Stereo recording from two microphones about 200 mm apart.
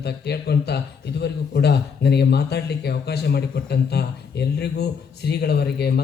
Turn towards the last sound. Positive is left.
turn(degrees=55)  # may be behind; listen again after turning